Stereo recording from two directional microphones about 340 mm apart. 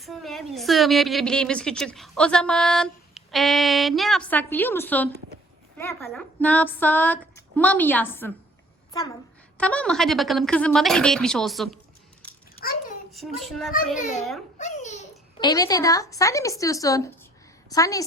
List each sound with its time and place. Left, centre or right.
0.0 s a woman's voice: centre
9.6 s a woman's voice: centre
12.2 s a sound: centre
12.6 s a child's voice: left
13.1 s a woman's voice: centre
14.6 s a child's voice: left